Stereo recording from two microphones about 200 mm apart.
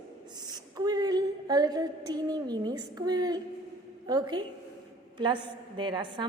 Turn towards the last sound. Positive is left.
turn(degrees=-25)  # may be behind; listen again after turning